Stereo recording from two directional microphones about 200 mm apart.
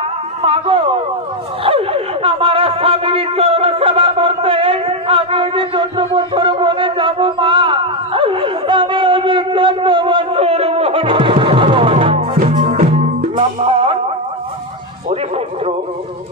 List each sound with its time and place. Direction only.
0.4 s speech: 25° right (ahead or behind)
1.6 s a sound: 30° right (ahead or behind)
12.4 s music: 40° right (ahead or behind)
13.4 s music: 25° right (ahead or behind)